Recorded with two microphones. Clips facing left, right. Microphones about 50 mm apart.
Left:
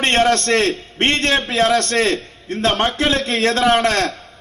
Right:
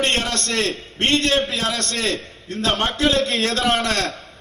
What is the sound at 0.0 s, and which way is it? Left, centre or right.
A man's voice, left.